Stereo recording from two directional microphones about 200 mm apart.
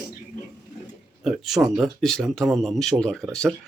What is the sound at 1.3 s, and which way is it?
Speech, centre (ahead or behind).